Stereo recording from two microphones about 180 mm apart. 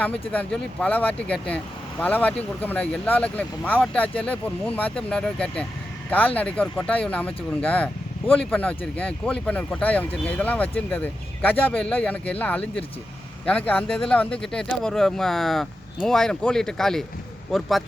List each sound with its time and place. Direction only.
0.0 s speech: 5° left (ahead or behind)